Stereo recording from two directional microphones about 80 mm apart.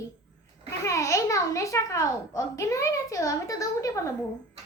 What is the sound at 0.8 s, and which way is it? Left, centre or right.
A child's voice, left.